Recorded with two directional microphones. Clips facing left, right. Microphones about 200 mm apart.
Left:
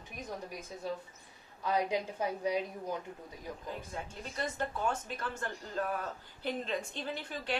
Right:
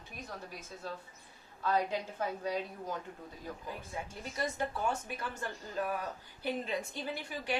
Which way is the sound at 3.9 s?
10° right (ahead or behind).